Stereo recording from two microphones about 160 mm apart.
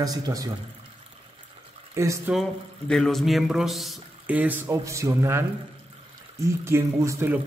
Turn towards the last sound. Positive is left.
turn(degrees=-15)  # may be behind; listen again after turning